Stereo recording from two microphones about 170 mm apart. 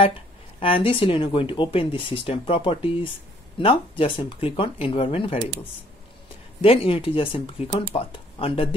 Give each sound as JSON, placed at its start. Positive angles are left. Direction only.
{"t": 0.6, "sound": "speech", "side_deg": 30}
{"t": 6.6, "sound": "speech", "side_deg": 35}